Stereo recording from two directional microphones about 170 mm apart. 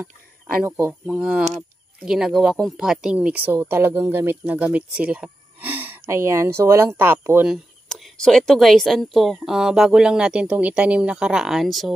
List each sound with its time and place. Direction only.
0.7 s speech: 15° right (ahead or behind)
1.0 s speech: 5° right (ahead or behind)
7.5 s speech: centre (ahead or behind)